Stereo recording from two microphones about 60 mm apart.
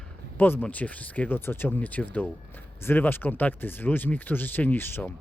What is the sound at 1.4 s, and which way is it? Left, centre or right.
Speech, left.